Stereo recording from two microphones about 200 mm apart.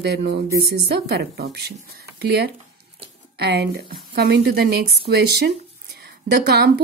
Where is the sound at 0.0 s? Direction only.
60° right (ahead or behind).